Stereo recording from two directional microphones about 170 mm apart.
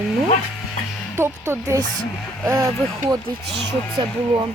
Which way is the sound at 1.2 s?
15° right (ahead or behind).